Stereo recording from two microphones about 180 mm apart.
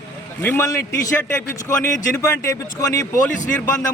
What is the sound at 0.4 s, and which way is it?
A man's voice, 15° left (ahead or behind).